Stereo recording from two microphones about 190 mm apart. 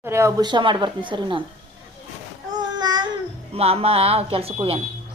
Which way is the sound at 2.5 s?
20° right (ahead or behind).